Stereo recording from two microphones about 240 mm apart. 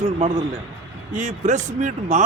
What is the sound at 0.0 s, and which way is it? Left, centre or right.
A man's voice, right.